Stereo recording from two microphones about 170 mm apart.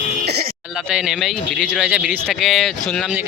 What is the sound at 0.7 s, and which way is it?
Speech, 5° right (ahead or behind).